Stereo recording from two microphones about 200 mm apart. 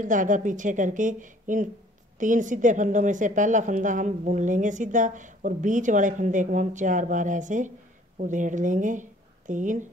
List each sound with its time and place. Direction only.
0.0 s a woman's voice: 40° right (ahead or behind)